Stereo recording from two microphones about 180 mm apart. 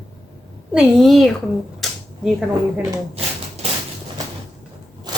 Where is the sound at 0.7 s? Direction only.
Centre (ahead or behind).